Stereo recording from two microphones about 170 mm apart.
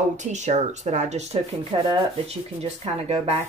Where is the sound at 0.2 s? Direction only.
45° right (ahead or behind).